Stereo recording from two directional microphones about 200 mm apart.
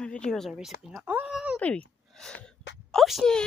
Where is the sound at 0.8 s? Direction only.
5° right (ahead or behind).